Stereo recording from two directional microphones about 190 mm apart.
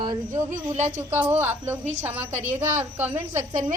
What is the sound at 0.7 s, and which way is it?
Speech, 40° right (ahead or behind).